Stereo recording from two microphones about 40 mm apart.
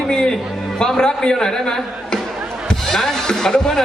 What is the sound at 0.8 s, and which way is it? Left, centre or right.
A man's voice, left.